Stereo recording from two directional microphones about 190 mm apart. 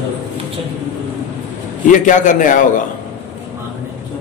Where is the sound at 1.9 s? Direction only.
40° left (ahead or behind).